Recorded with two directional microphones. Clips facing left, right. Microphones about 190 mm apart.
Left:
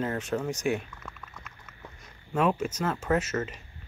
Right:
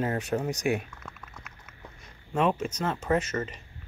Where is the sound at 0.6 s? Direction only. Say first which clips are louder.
Right 1 dB; 15° right (ahead or behind).